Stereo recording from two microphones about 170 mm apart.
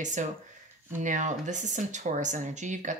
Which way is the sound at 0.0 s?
45° right (ahead or behind).